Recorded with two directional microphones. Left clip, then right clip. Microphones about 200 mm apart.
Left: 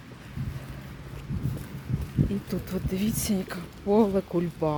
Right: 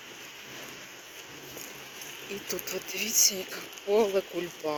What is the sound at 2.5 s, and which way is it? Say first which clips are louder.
Speech: left 1 dB; 15° left (ahead or behind).